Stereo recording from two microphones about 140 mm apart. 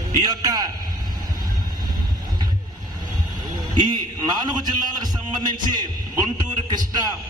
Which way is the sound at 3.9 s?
30° right (ahead or behind).